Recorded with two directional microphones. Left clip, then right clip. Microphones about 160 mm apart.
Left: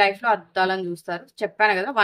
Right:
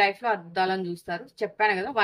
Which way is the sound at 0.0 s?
50° left (ahead or behind).